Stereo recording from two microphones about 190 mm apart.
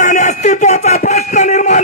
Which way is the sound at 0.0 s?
40° left (ahead or behind).